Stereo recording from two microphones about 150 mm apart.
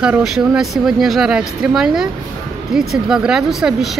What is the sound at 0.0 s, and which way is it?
Speech, 5° right (ahead or behind).